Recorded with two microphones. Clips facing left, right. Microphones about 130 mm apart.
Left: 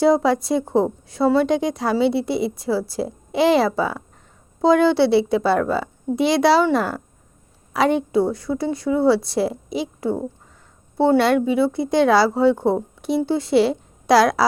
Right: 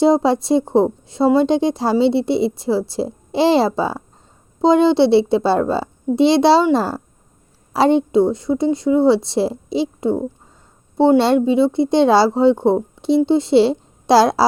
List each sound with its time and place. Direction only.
0.0 s a woman's voice: 25° right (ahead or behind)